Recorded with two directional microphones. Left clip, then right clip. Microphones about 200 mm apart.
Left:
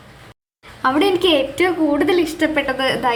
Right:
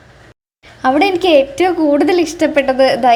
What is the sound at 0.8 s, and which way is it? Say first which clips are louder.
A woman's voice: right 3 dB; 25° right (ahead or behind).